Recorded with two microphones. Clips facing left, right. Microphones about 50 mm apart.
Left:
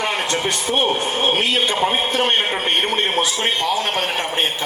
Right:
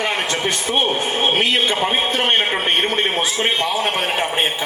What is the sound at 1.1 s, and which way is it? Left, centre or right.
Speech, right.